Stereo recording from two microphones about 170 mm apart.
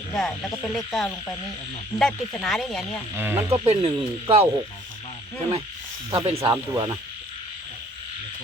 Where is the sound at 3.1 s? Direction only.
10° right (ahead or behind).